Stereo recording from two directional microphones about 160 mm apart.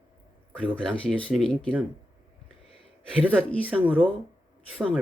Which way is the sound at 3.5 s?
10° left (ahead or behind).